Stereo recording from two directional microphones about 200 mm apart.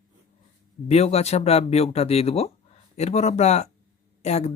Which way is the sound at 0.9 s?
30° left (ahead or behind).